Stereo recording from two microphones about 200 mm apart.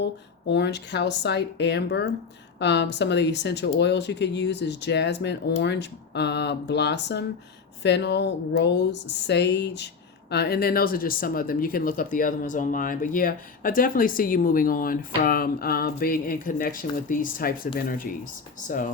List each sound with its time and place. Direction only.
0.0 s speech: 60° left (ahead or behind)